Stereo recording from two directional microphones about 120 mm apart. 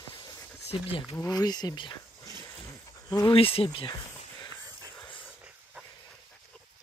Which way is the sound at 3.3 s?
50° left (ahead or behind).